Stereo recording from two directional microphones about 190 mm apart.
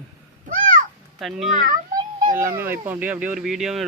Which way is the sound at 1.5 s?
40° right (ahead or behind).